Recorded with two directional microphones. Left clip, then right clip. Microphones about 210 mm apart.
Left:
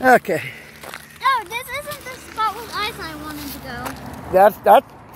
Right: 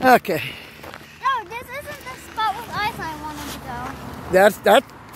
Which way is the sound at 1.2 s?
20° left (ahead or behind).